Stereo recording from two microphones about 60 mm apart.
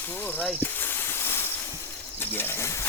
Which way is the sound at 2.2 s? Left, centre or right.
Left.